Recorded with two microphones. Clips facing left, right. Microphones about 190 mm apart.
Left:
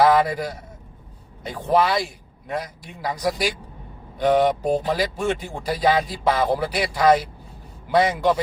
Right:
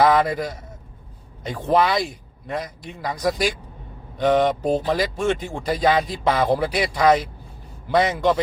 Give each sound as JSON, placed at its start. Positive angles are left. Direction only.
{"t": 0.0, "sound": "a man's voice", "side_deg": 10}
{"t": 1.5, "sound": "a man's voice", "side_deg": 5}